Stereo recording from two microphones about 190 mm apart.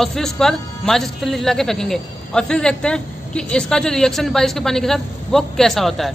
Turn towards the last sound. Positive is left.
turn(degrees=0)  # may be behind; listen again after turning